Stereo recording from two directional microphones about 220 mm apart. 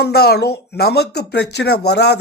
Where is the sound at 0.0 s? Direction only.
45° left (ahead or behind).